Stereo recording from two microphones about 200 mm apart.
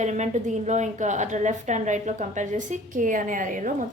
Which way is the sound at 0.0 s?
35° right (ahead or behind).